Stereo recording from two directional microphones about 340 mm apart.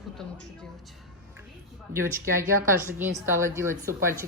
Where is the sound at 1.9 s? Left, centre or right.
Centre.